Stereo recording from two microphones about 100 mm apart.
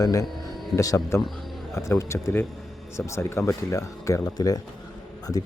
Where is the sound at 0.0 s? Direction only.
35° left (ahead or behind).